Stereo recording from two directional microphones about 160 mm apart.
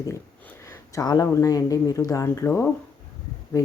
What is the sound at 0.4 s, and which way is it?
Speech, 20° left (ahead or behind).